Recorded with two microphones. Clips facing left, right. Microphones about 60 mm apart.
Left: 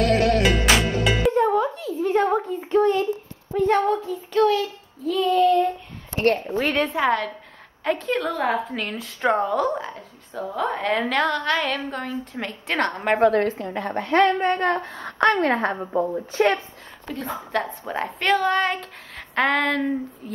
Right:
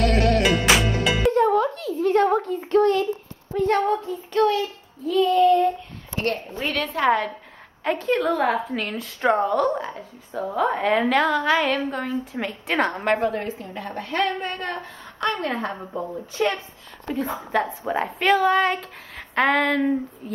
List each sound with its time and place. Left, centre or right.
0.0 s music: centre
3.5 s speech: centre
6.2 s a woman's voice: left
6.7 s a woman's voice: left
7.0 s a woman's voice: centre
13.2 s a woman's voice: left
15.0 s a woman's voice: left
15.3 s a woman's voice: left
15.7 s a woman's voice: left
16.3 s a woman's voice: left
17.2 s speech: centre